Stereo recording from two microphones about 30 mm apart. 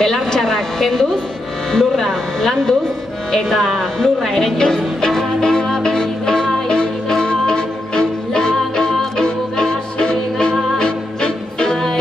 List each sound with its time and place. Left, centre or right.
0.0 s a woman's voice: centre
4.6 s speech: left
5.1 s music: left